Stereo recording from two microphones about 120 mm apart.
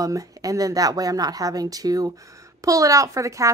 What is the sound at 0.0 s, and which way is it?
A woman's voice, 30° right (ahead or behind).